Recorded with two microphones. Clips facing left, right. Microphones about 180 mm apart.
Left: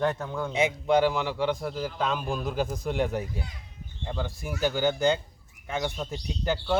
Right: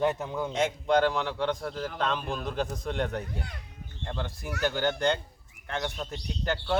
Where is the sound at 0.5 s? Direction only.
5° left (ahead or behind).